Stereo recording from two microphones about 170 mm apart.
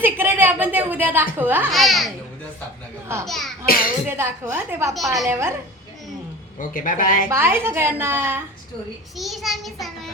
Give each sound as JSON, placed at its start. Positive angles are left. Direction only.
{"t": 0.0, "sound": "a woman's voice", "side_deg": -15}
{"t": 1.7, "sound": "a child's voice", "side_deg": 0}
{"t": 3.2, "sound": "a child's voice", "side_deg": 0}
{"t": 3.7, "sound": "speech", "side_deg": 55}
{"t": 4.1, "sound": "a woman's voice", "side_deg": -15}
{"t": 6.6, "sound": "speech", "side_deg": 55}
{"t": 7.3, "sound": "a woman's voice", "side_deg": -15}
{"t": 9.1, "sound": "a child's voice", "side_deg": 0}